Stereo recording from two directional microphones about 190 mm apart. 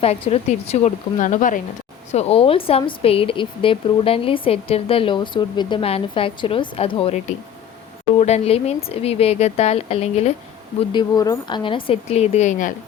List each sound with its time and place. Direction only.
0.0 s speech: 30° left (ahead or behind)
2.1 s a woman's voice: 30° left (ahead or behind)
10.8 s a woman's voice: 20° left (ahead or behind); by 12.7 s 40° left (ahead or behind)